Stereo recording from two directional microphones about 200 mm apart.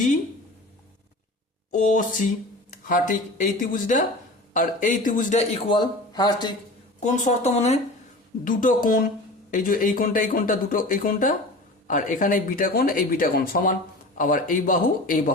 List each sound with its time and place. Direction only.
1.7 s speech: 40° left (ahead or behind); by 6.5 s 20° left (ahead or behind)
7.0 s speech: 35° left (ahead or behind)
8.4 s speech: 45° left (ahead or behind)